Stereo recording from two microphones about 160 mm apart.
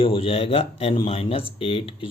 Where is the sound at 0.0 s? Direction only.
35° left (ahead or behind).